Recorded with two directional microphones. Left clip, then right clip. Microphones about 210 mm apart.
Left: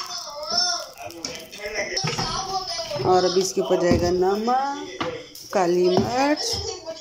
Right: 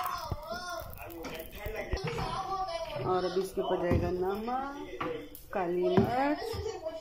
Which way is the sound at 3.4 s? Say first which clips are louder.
Left 10 dB; 15° left (ahead or behind).